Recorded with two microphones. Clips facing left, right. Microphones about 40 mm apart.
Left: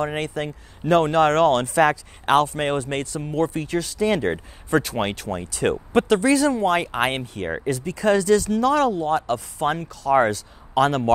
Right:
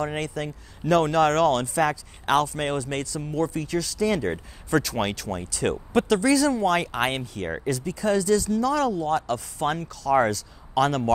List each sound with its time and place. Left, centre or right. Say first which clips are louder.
0.0 s speech: left 3 dB; left
4.6 s speech: left 2 dB; left
7.8 s speech: left 5 dB; left
9.3 s speech: left 3 dB; left